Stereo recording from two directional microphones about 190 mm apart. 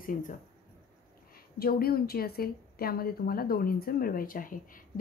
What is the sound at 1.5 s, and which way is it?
A woman's voice, 55° left (ahead or behind).